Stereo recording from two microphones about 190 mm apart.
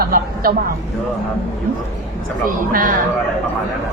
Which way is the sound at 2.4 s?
45° right (ahead or behind).